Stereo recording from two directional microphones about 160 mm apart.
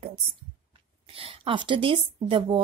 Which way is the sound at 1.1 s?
35° right (ahead or behind).